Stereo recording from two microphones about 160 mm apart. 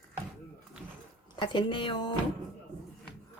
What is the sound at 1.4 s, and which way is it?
Speech, 30° left (ahead or behind).